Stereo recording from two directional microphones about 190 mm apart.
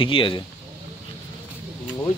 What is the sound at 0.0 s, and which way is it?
Speech, 25° left (ahead or behind).